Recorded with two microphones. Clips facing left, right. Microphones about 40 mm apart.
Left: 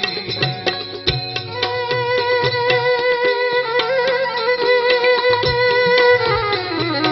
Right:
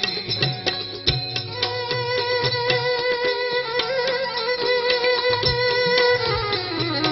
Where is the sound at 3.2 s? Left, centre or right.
Centre.